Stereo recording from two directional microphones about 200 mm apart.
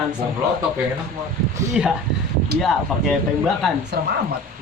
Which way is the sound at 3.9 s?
50° right (ahead or behind).